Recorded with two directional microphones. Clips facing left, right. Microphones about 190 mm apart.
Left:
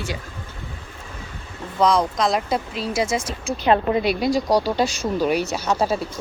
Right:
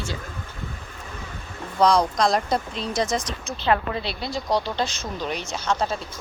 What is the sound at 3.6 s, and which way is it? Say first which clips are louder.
Speech: left 5 dB; 20° left (ahead or behind).